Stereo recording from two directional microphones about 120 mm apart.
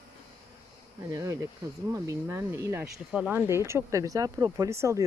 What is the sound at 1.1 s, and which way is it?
Speech, 25° right (ahead or behind).